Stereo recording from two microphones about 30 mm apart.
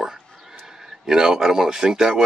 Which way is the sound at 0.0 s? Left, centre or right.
Centre.